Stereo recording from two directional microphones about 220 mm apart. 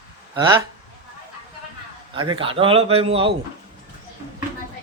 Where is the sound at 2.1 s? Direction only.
20° right (ahead or behind).